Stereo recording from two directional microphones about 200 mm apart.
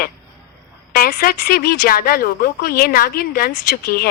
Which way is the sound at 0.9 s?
45° left (ahead or behind).